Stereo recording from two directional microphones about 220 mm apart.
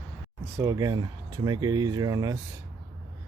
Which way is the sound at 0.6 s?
15° right (ahead or behind).